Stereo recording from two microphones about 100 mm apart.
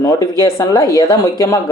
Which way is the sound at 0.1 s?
35° left (ahead or behind).